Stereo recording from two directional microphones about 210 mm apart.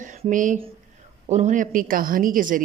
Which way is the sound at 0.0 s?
35° right (ahead or behind).